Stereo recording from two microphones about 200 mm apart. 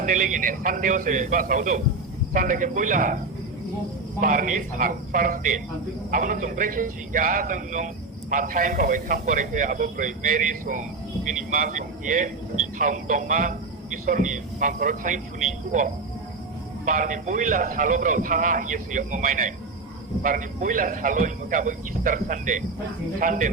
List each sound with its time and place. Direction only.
0.0 s a man's voice: 40° right (ahead or behind)
4.2 s a man's voice: 40° right (ahead or behind)